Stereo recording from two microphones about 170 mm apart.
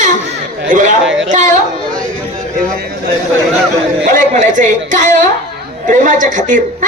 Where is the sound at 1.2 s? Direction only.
45° right (ahead or behind).